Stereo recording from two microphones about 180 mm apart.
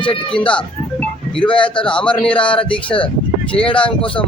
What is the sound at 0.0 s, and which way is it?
Speech, 30° left (ahead or behind).